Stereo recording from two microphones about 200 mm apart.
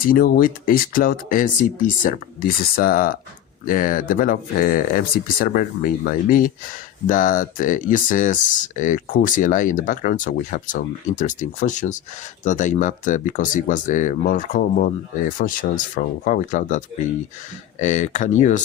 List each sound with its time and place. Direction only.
0.0 s speech: 45° left (ahead or behind)